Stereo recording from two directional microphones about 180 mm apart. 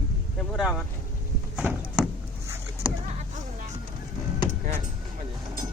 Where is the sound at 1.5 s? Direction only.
5° right (ahead or behind).